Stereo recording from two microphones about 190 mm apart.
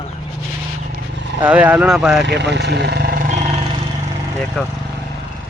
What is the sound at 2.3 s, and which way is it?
Vehicle, 65° right (ahead or behind).